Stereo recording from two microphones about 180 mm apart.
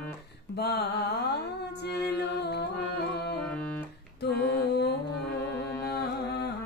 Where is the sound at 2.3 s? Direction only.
65° left (ahead or behind).